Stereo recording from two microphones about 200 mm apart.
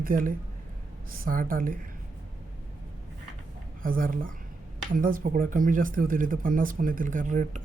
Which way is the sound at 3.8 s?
45° right (ahead or behind).